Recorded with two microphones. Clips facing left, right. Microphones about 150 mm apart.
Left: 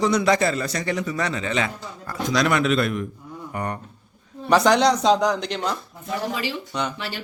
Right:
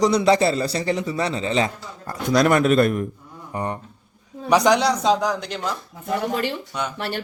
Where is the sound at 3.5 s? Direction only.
25° right (ahead or behind).